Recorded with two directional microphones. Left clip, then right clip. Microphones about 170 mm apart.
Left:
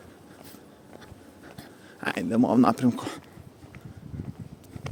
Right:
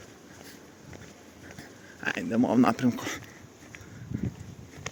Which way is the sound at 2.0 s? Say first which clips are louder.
Left 2 dB; 30° left (ahead or behind).